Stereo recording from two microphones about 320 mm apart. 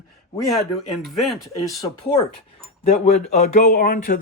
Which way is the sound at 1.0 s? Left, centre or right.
Centre.